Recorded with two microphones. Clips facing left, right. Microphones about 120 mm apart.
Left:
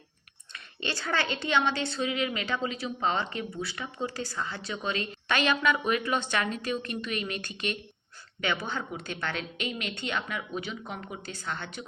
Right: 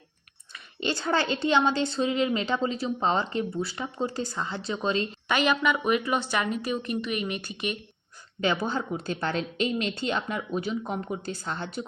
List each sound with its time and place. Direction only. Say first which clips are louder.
0.9 s a woman's voice: right 4 dB; 25° right (ahead or behind)
5.3 s a woman's voice: right 2 dB; 10° right (ahead or behind)
8.6 s a woman's voice: right 6 dB; 35° right (ahead or behind)